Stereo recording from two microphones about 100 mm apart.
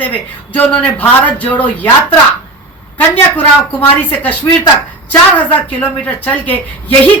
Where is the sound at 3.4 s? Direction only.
15° left (ahead or behind).